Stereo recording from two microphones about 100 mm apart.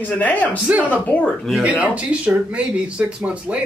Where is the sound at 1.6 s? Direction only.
15° right (ahead or behind).